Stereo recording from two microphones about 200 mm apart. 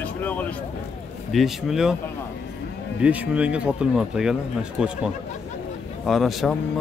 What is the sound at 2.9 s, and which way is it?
Speech, 5° right (ahead or behind).